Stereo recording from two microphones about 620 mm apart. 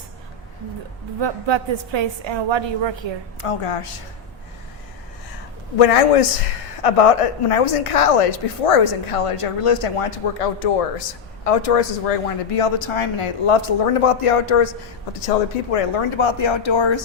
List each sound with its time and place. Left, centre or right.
1.2 s a woman's voice: right
3.4 s speech: left
5.8 s a woman's voice: left
15.7 s speech: left